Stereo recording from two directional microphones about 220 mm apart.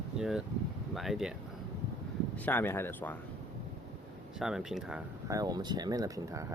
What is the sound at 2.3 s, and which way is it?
Speech, 10° left (ahead or behind).